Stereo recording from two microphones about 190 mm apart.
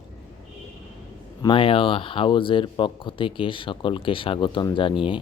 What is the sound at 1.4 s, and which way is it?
Speech, 25° left (ahead or behind).